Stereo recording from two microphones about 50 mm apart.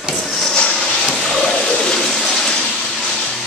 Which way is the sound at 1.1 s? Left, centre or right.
Centre.